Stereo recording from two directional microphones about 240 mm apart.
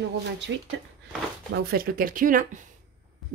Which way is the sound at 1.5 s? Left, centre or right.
Right.